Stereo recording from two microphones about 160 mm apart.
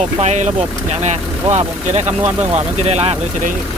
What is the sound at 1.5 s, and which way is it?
Speech, 45° right (ahead or behind).